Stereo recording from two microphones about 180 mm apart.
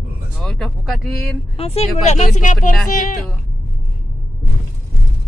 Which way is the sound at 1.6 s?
35° left (ahead or behind).